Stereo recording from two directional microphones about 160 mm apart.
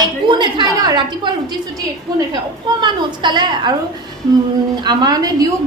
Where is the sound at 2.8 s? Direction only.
30° right (ahead or behind).